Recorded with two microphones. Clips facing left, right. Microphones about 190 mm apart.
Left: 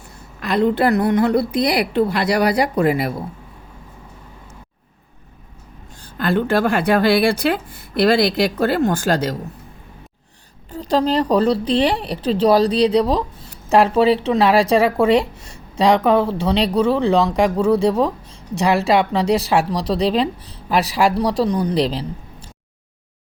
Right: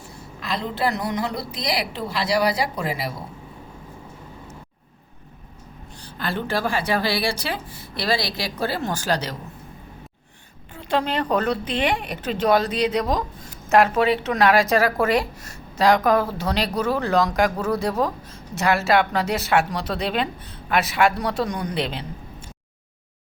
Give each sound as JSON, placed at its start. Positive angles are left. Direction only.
{"t": 0.3, "sound": "a woman's voice", "side_deg": 60}
{"t": 6.0, "sound": "a woman's voice", "side_deg": 50}
{"t": 10.7, "sound": "speech", "side_deg": 40}